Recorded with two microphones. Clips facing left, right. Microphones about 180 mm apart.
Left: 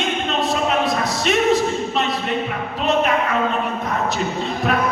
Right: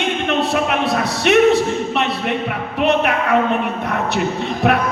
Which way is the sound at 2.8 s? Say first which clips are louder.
Right 2 dB; 65° right (ahead or behind).